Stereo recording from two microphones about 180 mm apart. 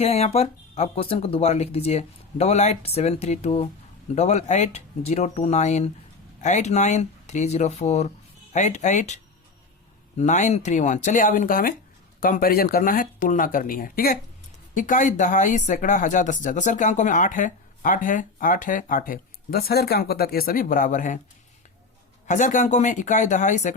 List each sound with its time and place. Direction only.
0.0 s speech: 35° left (ahead or behind)
22.3 s speech: 45° left (ahead or behind)